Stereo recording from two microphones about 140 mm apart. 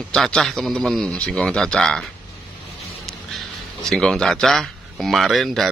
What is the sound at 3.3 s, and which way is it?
Speech, 5° left (ahead or behind).